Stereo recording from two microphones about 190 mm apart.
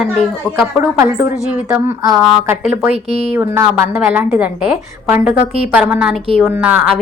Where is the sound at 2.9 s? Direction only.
35° right (ahead or behind).